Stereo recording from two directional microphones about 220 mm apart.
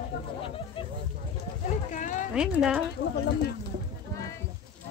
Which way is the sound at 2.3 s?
5° right (ahead or behind).